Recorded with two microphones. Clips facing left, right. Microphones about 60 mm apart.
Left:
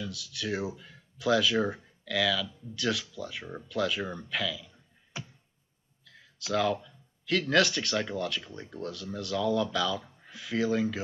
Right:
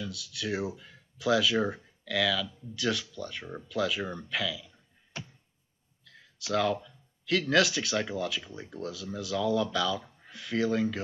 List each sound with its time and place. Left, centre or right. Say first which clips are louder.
0.0 s speech: even; centre
6.0 s speech: even; centre